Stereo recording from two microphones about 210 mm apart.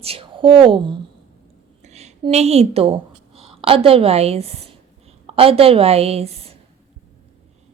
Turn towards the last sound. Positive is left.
turn(degrees=-30)  # may be behind; listen again after turning